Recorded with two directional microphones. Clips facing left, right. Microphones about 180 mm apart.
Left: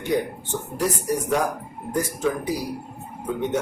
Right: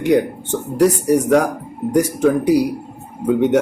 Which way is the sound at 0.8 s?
70° right (ahead or behind).